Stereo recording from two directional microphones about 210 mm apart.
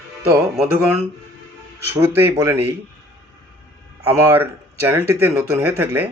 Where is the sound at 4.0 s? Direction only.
10° right (ahead or behind).